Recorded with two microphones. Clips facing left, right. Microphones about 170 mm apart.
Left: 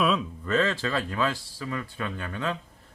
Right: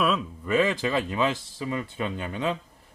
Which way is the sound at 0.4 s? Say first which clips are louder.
Right 3 dB; 10° right (ahead or behind).